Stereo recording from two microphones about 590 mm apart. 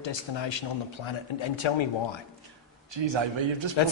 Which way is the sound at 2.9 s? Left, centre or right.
Right.